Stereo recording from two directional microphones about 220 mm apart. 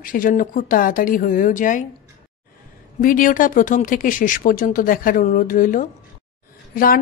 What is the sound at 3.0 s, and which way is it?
A woman's voice, 40° left (ahead or behind).